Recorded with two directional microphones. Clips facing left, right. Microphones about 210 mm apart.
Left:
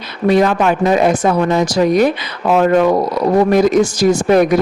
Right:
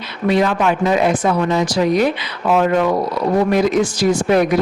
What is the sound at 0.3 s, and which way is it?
Speech, 45° left (ahead or behind).